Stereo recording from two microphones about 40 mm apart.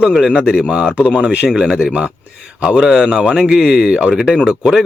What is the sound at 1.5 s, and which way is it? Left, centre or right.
Speech, centre.